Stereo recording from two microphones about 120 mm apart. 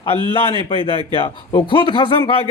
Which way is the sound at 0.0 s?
50° left (ahead or behind).